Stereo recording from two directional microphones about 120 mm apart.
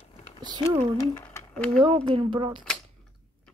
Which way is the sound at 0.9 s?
30° left (ahead or behind).